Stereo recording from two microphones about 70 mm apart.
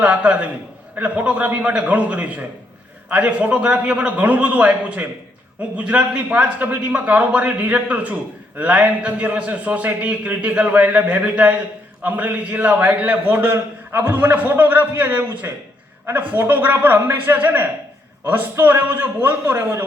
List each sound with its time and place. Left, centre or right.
0.0 s a man's voice: centre